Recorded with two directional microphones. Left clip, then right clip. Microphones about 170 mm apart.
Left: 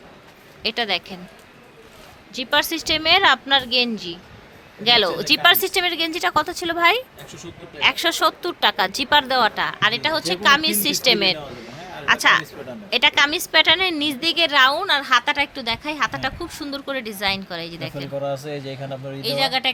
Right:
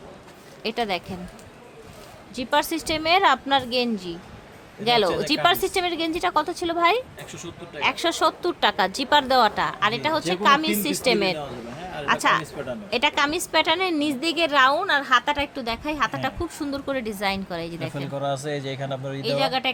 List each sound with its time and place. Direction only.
0.6 s a woman's voice: centre (ahead or behind)
2.3 s a woman's voice: centre (ahead or behind)
19.2 s speech: 10° left (ahead or behind)